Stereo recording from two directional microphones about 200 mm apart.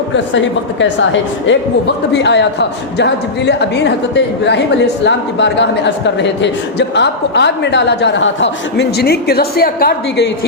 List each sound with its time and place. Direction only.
0.1 s a man's voice: 65° left (ahead or behind); by 9.9 s 50° left (ahead or behind)